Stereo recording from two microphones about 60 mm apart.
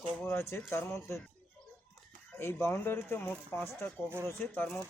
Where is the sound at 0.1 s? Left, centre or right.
Left.